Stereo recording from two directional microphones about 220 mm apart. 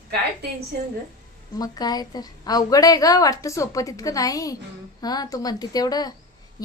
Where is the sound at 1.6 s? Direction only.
15° left (ahead or behind).